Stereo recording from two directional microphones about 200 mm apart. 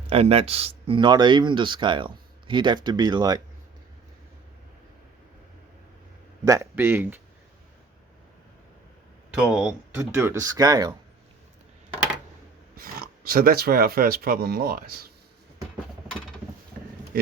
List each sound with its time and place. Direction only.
0.1 s speech: 30° right (ahead or behind)
6.4 s speech: 15° right (ahead or behind)
9.3 s speech: 5° right (ahead or behind)
12.7 s speech: 45° right (ahead or behind)